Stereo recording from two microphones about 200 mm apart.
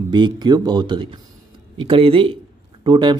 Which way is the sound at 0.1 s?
20° right (ahead or behind).